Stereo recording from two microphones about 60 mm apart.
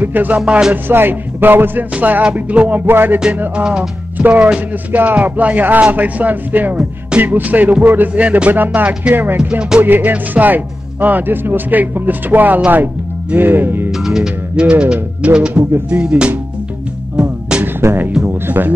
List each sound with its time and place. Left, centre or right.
0.0 s speech: right
0.5 s music: centre
0.8 s speech: right
3.5 s music: centre
4.2 s speech: right
8.1 s speech: right
9.4 s speech: centre
9.8 s speech: right
13.9 s speech: centre
17.2 s music: centre
17.7 s speech: right